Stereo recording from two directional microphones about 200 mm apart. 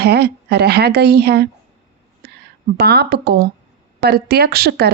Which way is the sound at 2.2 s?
55° right (ahead or behind).